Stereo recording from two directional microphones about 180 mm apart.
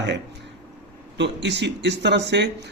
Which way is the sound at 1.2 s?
75° right (ahead or behind).